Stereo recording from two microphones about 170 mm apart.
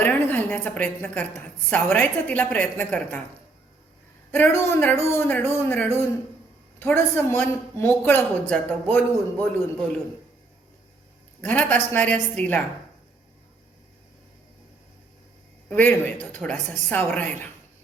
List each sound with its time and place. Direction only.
0.0 s a sound: 10° left (ahead or behind)
1.7 s a woman's voice: 10° left (ahead or behind)
4.3 s a woman's voice: 15° left (ahead or behind)
11.3 s a woman's voice: 10° left (ahead or behind)
15.7 s a woman's voice: 10° left (ahead or behind)